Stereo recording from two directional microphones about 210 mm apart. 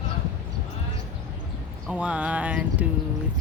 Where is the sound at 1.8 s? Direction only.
5° right (ahead or behind).